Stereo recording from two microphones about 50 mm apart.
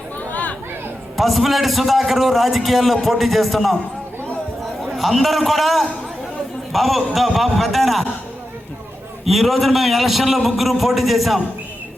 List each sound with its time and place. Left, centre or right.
0.2 s a sound: left
1.1 s a man's voice: centre
4.8 s a man's voice: centre
9.2 s a man's voice: centre